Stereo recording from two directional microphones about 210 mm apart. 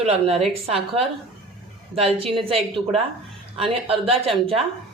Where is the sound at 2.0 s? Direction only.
25° right (ahead or behind).